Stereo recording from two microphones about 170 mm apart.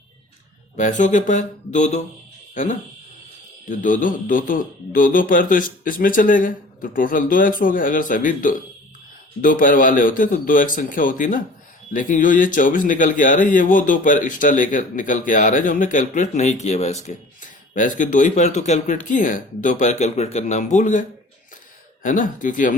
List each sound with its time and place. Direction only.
0.8 s a man's voice: 45° left (ahead or behind)
22.0 s a man's voice: 50° left (ahead or behind)